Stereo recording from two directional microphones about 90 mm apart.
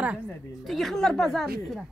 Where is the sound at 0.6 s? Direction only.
5° left (ahead or behind).